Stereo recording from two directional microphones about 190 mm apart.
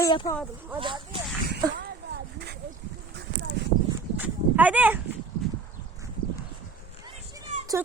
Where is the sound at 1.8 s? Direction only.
60° right (ahead or behind).